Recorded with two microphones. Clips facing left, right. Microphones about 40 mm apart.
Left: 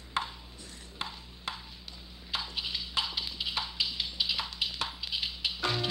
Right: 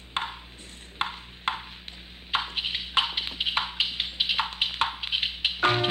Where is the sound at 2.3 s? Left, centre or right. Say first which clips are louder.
Right 7 dB; right.